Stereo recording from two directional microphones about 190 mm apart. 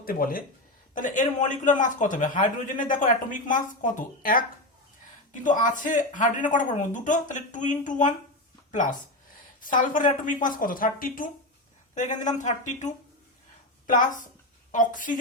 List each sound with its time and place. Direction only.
0.0 s a man's voice: 50° left (ahead or behind)